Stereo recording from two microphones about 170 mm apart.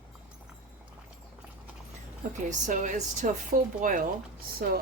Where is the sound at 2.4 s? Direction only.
45° right (ahead or behind).